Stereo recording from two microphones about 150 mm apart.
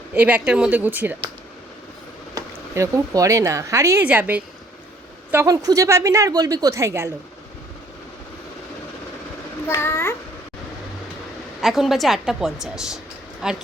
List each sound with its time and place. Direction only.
0.1 s speech: 10° right (ahead or behind)
2.3 s a woman's voice: 20° right (ahead or behind)
9.6 s a child's voice: 15° left (ahead or behind)
11.6 s a woman's voice: centre (ahead or behind)